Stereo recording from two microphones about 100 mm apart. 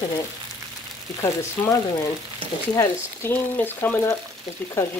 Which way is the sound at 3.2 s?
25° left (ahead or behind).